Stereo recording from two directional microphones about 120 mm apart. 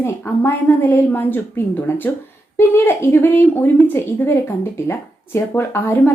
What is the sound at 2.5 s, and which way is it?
A woman's voice, 20° left (ahead or behind).